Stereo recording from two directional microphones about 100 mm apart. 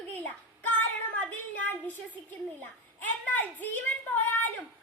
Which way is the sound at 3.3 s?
20° left (ahead or behind).